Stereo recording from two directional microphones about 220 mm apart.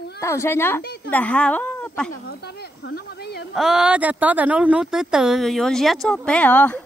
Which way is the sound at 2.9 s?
50° left (ahead or behind).